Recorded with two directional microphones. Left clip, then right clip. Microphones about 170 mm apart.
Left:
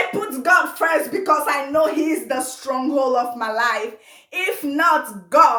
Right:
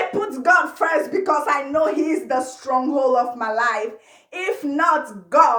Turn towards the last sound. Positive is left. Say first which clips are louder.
# left 1 dB
turn(degrees=20)  # may be behind; listen again after turning